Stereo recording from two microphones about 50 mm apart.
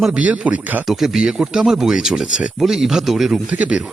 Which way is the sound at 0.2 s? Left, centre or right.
Right.